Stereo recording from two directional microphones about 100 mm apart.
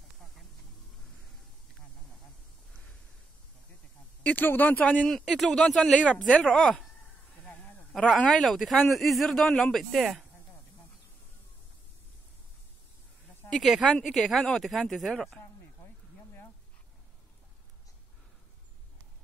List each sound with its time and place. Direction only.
4.2 s speech: 15° left (ahead or behind)
5.1 s speech: 5° left (ahead or behind)
7.9 s speech: 10° left (ahead or behind)
13.5 s speech: centre (ahead or behind)